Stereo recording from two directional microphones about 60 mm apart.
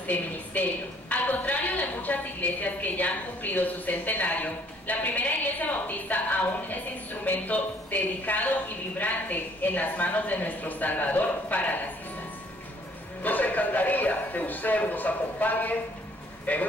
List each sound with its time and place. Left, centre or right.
0.0 s a woman's voice: left
13.2 s a woman's voice: left